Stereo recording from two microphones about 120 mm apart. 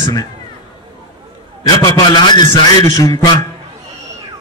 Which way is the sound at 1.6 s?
35° left (ahead or behind).